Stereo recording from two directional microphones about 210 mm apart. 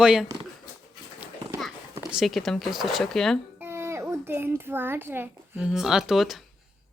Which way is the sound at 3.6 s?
10° right (ahead or behind).